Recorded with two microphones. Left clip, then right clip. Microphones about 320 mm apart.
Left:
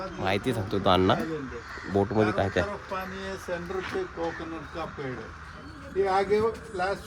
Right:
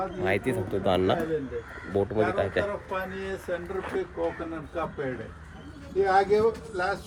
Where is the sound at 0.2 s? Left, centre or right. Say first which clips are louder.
Left 1 dB; centre.